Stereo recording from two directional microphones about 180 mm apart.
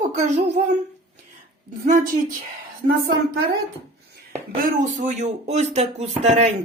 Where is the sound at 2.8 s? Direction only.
35° right (ahead or behind).